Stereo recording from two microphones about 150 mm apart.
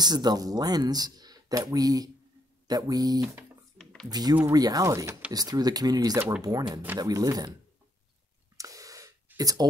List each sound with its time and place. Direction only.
0.0 s speech: 30° right (ahead or behind)
3.7 s typing: 5° left (ahead or behind)
4.1 s speech: 25° right (ahead or behind)
8.5 s a sound: 20° right (ahead or behind)